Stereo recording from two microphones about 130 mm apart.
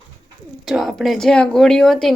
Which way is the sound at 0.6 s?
Centre (ahead or behind).